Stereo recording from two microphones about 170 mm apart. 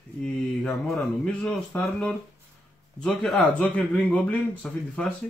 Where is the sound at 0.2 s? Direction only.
Centre (ahead or behind).